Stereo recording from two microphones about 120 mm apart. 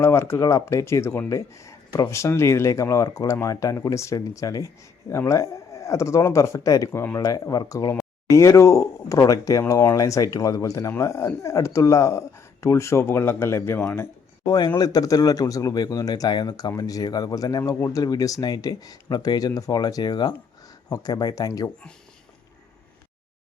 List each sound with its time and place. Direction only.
0.0 s speech: 20° left (ahead or behind)
14.4 s speech: 35° left (ahead or behind)